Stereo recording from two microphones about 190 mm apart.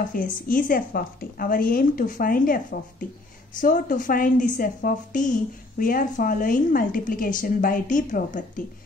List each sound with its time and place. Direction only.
0.1 s a woman's voice: 45° left (ahead or behind)